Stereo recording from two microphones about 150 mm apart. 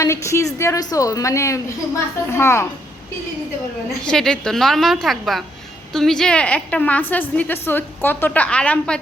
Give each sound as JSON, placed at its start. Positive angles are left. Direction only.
{"t": 0.0, "sound": "a woman's voice", "side_deg": 20}
{"t": 4.0, "sound": "a woman's voice", "side_deg": 5}